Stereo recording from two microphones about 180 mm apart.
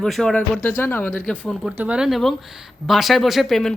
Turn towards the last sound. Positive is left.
turn(degrees=0)  # may be behind; listen again after turning